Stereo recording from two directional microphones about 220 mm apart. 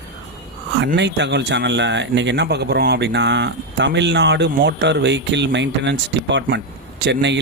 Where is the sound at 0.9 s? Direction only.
50° right (ahead or behind).